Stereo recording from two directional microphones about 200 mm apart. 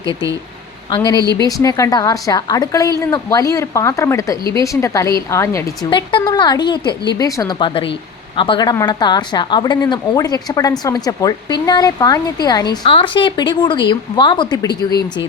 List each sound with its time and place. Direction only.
0.9 s a woman's voice: 20° left (ahead or behind)